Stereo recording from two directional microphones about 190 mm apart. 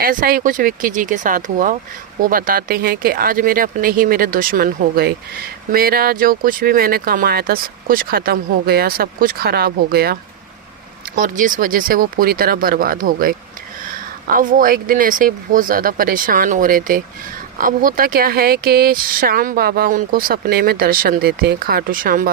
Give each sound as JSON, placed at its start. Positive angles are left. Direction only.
{"t": 0.0, "sound": "speech", "side_deg": -50}
{"t": 11.1, "sound": "speech", "side_deg": -45}